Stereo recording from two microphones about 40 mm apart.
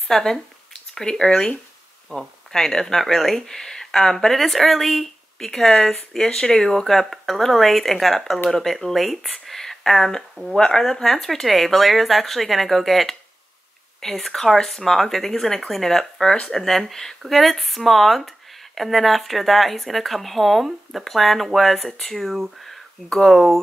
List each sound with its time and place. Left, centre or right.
0.1 s speech: centre